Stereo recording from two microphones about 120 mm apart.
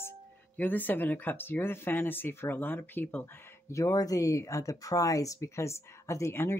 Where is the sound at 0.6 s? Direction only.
15° left (ahead or behind).